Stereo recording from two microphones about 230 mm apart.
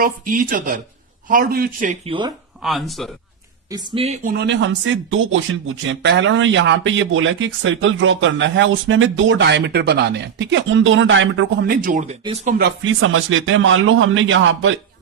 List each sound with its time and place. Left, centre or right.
0.0 s speech: right
2.6 s speech: centre
3.7 s speech: right
11.6 s speech: right
12.5 s a man's voice: right